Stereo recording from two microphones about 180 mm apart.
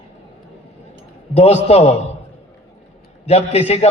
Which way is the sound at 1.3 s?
35° left (ahead or behind).